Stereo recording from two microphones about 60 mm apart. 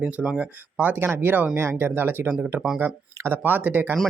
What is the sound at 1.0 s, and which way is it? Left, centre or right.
Speech, right.